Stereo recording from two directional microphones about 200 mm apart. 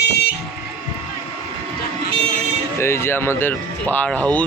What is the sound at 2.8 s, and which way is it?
Speech, 15° left (ahead or behind).